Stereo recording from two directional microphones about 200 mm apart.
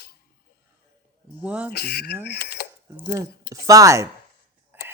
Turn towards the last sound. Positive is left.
turn(degrees=-10)  # may be behind; listen again after turning